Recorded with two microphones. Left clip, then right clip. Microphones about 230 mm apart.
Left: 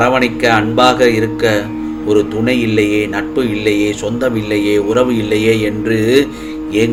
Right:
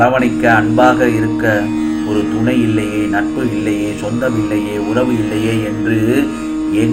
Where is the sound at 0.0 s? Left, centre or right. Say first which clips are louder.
Even; left.